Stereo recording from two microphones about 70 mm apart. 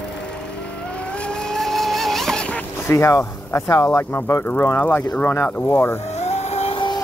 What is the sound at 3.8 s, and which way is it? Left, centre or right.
Speech, left.